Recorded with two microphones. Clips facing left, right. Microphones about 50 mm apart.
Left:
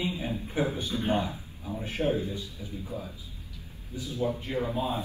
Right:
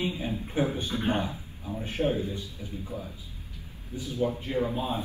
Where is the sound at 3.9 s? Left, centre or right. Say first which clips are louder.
Right 2 dB; right.